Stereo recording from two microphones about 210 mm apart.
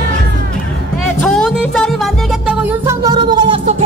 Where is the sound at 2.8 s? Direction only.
15° right (ahead or behind).